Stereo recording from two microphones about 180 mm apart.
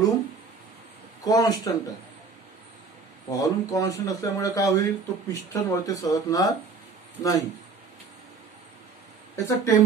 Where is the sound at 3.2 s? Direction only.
20° left (ahead or behind).